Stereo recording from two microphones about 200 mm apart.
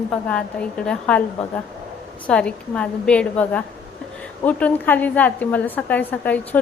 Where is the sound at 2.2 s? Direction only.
5° left (ahead or behind).